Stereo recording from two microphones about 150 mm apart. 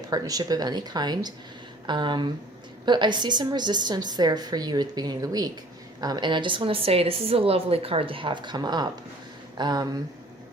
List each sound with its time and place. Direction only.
0.1 s a woman's voice: 25° right (ahead or behind)